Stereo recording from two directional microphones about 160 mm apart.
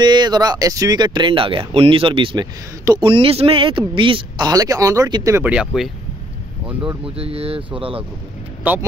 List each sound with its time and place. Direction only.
0.0 s speech: 25° right (ahead or behind)
5.4 s speech: 5° right (ahead or behind)
7.2 s speech: 35° right (ahead or behind)
8.6 s speech: 10° right (ahead or behind)